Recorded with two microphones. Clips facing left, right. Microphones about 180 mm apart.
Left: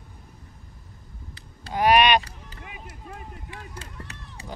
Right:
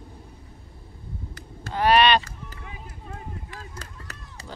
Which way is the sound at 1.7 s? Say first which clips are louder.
Even; 10° left (ahead or behind).